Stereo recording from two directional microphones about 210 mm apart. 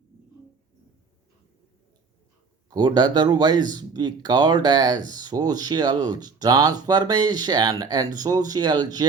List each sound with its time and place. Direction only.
2.6 s speech: 20° right (ahead or behind)